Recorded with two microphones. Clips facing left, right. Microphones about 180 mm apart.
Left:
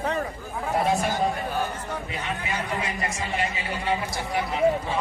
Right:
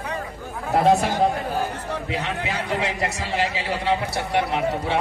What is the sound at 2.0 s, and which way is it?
A man's voice, 75° right (ahead or behind).